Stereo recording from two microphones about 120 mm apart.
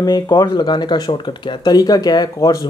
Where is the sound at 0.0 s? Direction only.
35° left (ahead or behind).